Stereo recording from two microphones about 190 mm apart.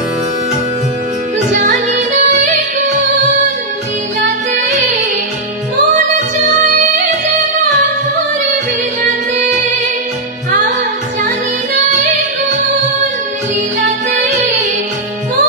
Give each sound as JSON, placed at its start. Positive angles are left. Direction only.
{"t": 1.9, "sound": "music", "side_deg": -40}
{"t": 14.1, "sound": "music", "side_deg": -35}